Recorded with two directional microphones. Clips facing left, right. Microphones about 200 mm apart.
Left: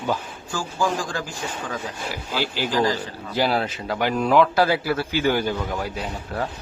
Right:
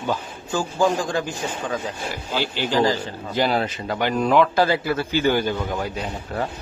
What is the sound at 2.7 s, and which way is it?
Speech, 25° right (ahead or behind).